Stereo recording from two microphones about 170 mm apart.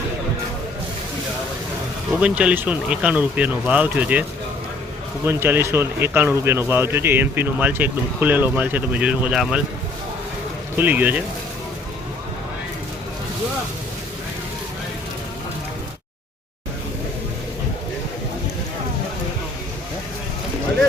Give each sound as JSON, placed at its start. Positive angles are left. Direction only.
{"t": 2.2, "sound": "a man's voice", "side_deg": -5}
{"t": 10.8, "sound": "a man's voice", "side_deg": -10}